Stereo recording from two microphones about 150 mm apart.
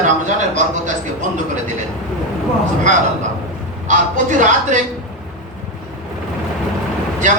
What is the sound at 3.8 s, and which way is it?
Speech, 55° right (ahead or behind).